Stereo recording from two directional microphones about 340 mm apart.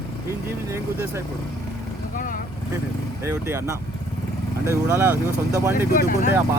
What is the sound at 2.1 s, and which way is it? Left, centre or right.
Vehicle, left.